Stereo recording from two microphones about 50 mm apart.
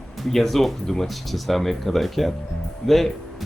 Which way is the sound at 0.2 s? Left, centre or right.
Centre.